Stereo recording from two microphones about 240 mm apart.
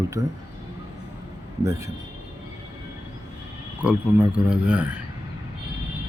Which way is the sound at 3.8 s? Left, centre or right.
Centre.